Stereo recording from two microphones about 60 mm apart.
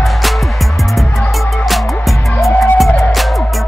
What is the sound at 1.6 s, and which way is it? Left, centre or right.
Music, centre.